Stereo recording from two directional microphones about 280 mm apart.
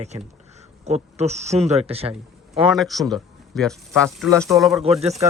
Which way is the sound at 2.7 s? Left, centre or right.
Centre.